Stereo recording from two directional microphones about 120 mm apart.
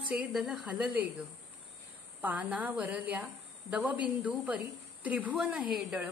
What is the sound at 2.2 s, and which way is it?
A woman's voice, 15° right (ahead or behind).